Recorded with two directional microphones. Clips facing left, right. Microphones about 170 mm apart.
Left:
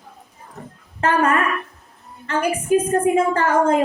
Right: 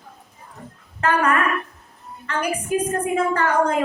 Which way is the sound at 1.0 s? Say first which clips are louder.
Left 2 dB; 25° left (ahead or behind).